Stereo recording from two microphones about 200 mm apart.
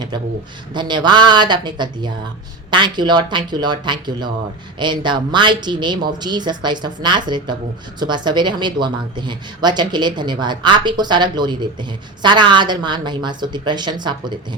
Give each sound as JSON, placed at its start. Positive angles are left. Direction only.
{"t": 0.7, "sound": "speech", "side_deg": -20}